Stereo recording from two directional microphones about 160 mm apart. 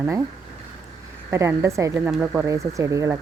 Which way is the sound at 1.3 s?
15° right (ahead or behind).